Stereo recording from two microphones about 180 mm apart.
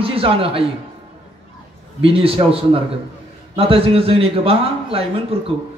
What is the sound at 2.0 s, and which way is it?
A man's voice, 30° right (ahead or behind).